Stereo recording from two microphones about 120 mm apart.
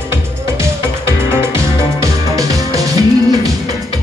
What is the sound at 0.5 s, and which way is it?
Music, 20° right (ahead or behind).